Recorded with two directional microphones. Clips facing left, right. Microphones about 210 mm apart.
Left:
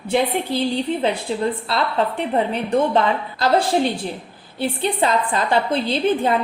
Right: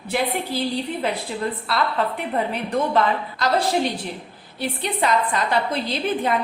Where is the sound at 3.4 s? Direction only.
30° left (ahead or behind).